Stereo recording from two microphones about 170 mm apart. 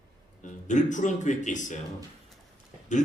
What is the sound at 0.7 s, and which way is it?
A man's voice, 45° left (ahead or behind).